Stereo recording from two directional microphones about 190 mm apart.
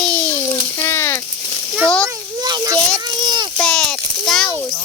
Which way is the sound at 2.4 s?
20° right (ahead or behind).